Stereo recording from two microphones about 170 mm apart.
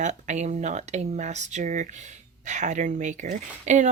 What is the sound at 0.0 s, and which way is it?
Speech, 45° right (ahead or behind).